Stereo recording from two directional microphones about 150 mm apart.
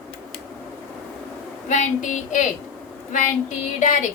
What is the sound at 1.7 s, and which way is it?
Speech, 55° left (ahead or behind).